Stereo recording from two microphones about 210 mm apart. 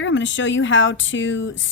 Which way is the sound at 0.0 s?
60° left (ahead or behind).